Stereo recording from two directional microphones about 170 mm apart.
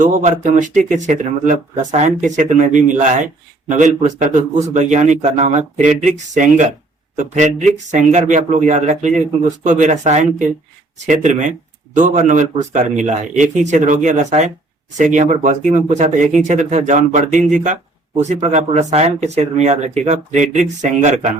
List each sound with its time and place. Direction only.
0.0 s speech: 45° right (ahead or behind)